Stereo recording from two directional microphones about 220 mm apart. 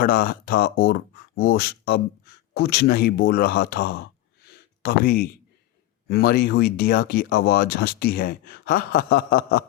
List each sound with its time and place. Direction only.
0.0 s speech: 40° left (ahead or behind)